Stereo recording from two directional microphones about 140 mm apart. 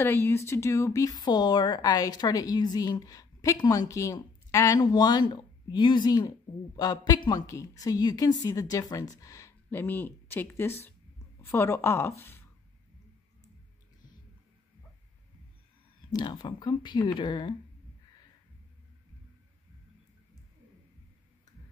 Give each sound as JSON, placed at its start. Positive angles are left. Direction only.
{"t": 0.0, "sound": "speech", "side_deg": 15}
{"t": 16.1, "sound": "speech", "side_deg": 30}